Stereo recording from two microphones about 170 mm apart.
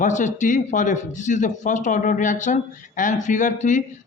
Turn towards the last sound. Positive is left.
turn(degrees=50)  # may be behind; listen again after turning